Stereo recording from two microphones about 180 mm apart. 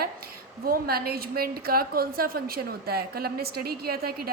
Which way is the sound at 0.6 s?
55° right (ahead or behind).